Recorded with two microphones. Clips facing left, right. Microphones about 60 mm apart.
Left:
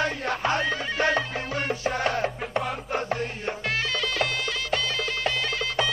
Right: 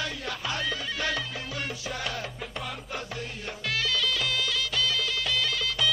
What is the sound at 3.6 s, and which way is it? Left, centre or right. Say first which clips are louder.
Music: even; left.